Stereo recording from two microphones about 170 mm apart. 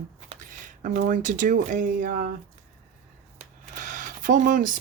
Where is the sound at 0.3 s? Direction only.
45° right (ahead or behind).